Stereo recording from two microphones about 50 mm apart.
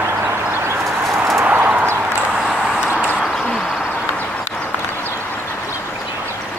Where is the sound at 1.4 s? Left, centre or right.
Right.